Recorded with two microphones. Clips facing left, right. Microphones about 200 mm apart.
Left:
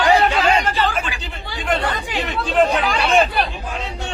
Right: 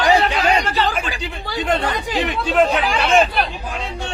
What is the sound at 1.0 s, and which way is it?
Speech, 35° right (ahead or behind).